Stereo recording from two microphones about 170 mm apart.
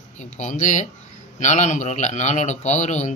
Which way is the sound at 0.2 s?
45° left (ahead or behind).